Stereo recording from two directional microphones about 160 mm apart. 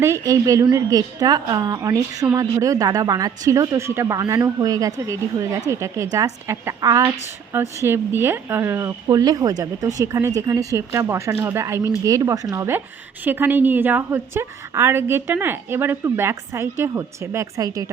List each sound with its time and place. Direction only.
0.0 s a woman's voice: 20° right (ahead or behind)